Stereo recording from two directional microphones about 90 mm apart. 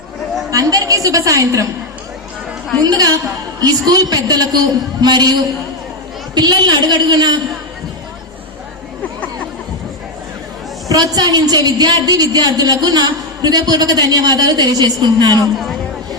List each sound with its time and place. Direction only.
0.5 s a woman's voice: 40° right (ahead or behind)
2.8 s a woman's voice: 45° right (ahead or behind)
6.3 s a woman's voice: 50° right (ahead or behind)
10.8 s a woman's voice: 45° right (ahead or behind)